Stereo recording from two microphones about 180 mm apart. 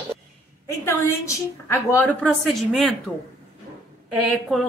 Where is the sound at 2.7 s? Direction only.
5° right (ahead or behind).